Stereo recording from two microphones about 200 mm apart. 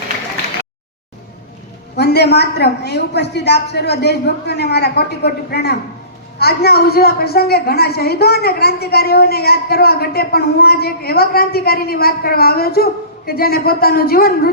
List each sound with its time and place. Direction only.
2.0 s a woman's voice: 55° left (ahead or behind)